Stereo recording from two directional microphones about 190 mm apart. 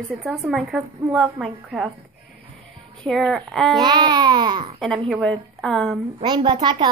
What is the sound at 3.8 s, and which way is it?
Speech, 25° right (ahead or behind).